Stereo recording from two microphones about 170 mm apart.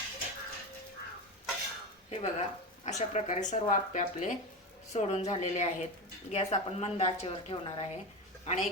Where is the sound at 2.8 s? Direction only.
45° left (ahead or behind).